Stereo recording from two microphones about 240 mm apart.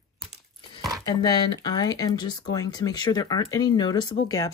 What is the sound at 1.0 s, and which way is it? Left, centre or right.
Speech, centre.